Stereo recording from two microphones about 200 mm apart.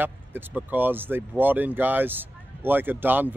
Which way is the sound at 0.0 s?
10° right (ahead or behind).